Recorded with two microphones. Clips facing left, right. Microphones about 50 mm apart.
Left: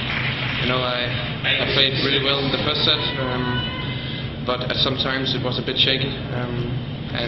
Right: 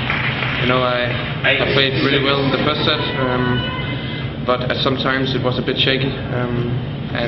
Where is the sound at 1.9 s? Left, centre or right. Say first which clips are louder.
Right 5 dB; right.